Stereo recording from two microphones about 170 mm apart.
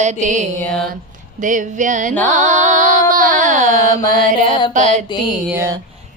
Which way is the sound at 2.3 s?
45° right (ahead or behind).